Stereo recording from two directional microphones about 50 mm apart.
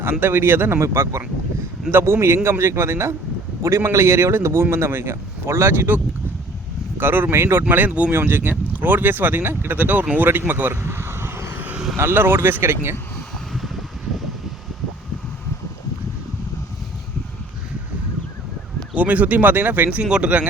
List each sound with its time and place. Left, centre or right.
0.0 s speech: right
0.8 s speech: right
1.9 s speech: right
3.6 s speech: right
3.8 s speech: right
7.0 s speech: right
7.9 s speech: right
8.1 s speech: right
10.8 s vehicle: right
11.5 s vehicle: right
11.9 s speech: right
18.9 s speech: right
20.0 s speech: centre